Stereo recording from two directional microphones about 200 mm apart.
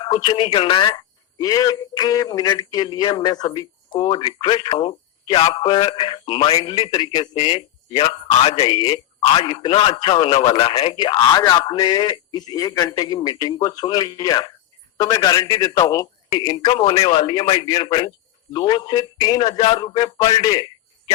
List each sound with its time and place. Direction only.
0.0 s speech: 25° left (ahead or behind)